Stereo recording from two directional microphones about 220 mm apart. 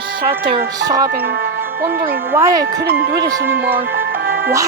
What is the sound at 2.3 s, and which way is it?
Music, 15° right (ahead or behind).